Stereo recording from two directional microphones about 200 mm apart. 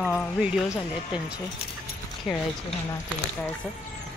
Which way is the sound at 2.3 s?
Centre (ahead or behind).